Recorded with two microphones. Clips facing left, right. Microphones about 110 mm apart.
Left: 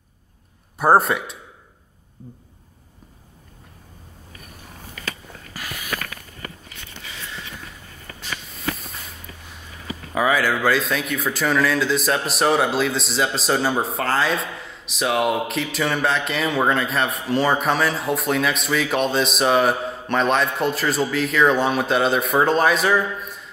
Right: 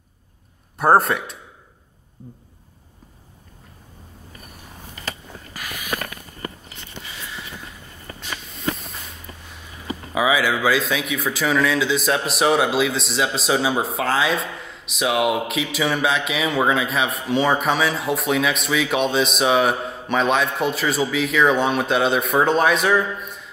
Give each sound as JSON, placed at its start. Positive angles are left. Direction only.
{"t": 0.7, "sound": "speech", "side_deg": 0}
{"t": 5.5, "sound": "a sound", "side_deg": -15}
{"t": 8.5, "sound": "walk", "side_deg": 0}
{"t": 10.1, "sound": "speech", "side_deg": -5}